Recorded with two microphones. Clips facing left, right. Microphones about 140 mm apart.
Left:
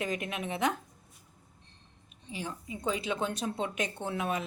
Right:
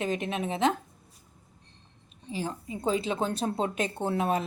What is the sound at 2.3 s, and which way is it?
Speech, 35° right (ahead or behind).